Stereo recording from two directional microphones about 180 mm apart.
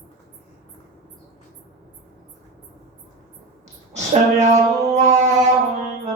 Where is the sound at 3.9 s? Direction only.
40° right (ahead or behind).